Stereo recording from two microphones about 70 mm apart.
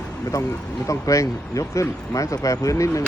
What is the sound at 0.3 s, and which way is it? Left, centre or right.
Speech, left.